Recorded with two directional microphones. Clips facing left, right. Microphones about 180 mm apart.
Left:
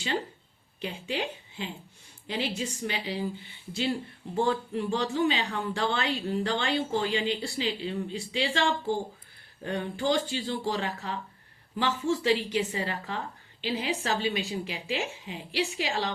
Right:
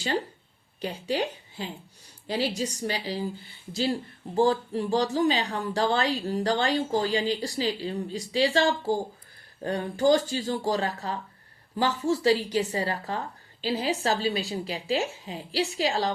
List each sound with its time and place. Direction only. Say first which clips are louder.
0.8 s a woman's voice: right 4 dB; 40° right (ahead or behind)